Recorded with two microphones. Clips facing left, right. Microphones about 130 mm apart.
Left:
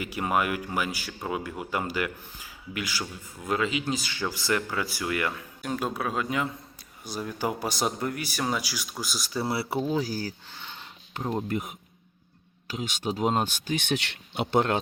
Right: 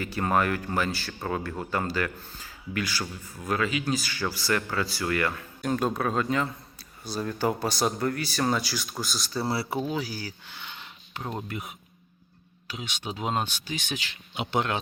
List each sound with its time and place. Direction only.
0.0 s speech: 15° left (ahead or behind)
9.6 s speech: 15° right (ahead or behind)
9.9 s speech: 40° left (ahead or behind); by 14.2 s 65° left (ahead or behind)
14.5 s speech: 45° left (ahead or behind)